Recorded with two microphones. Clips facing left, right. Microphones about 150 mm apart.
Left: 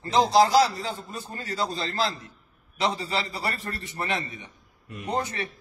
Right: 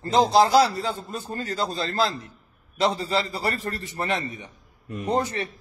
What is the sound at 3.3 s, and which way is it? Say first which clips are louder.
Speech: right 4 dB; 35° right (ahead or behind).